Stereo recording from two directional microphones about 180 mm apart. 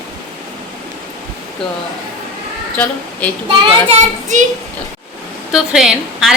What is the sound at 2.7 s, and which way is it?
Speech, 10° left (ahead or behind).